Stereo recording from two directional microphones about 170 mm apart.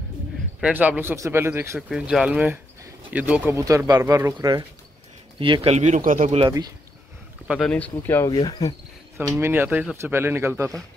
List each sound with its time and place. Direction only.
0.6 s speech: 5° right (ahead or behind)
1.8 s speech: 5° right (ahead or behind)
3.5 s speech: 20° right (ahead or behind); by 6.4 s 45° right (ahead or behind)
6.4 s speech: 25° right (ahead or behind)
7.5 s speech: 5° left (ahead or behind)
8.3 s speech: 25° left (ahead or behind)
9.4 s speech: 10° right (ahead or behind)